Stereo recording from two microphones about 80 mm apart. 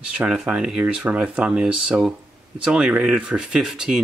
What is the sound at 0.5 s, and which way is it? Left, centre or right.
Speech, centre.